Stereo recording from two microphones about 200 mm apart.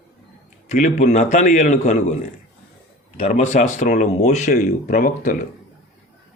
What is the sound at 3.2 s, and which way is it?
Speech, 35° left (ahead or behind).